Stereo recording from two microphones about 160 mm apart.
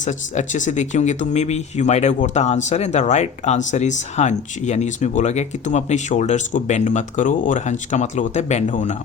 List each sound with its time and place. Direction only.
0.0 s speech: 50° left (ahead or behind)